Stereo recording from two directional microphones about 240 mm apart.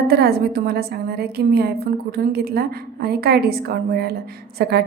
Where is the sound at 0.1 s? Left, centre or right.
Right.